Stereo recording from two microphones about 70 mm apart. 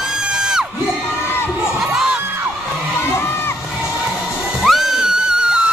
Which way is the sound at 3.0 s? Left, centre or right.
Left.